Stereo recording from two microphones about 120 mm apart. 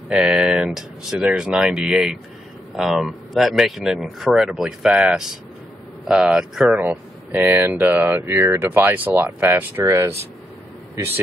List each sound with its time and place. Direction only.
0.1 s speech: 5° right (ahead or behind)